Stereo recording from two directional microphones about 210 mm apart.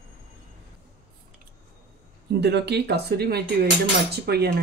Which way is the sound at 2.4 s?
55° right (ahead or behind).